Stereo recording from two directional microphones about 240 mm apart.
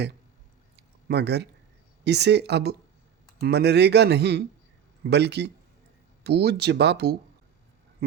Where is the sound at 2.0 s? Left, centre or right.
Right.